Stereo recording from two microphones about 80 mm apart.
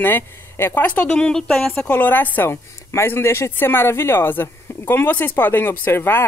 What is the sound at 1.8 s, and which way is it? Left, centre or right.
Speech, left.